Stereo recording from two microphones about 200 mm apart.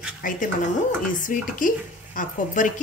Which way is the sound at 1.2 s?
40° left (ahead or behind).